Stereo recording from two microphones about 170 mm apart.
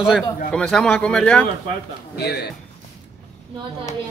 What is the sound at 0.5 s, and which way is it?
A man's voice, 5° left (ahead or behind).